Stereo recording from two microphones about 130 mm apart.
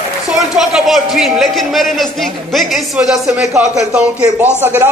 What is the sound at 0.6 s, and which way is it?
A man's voice, centre (ahead or behind).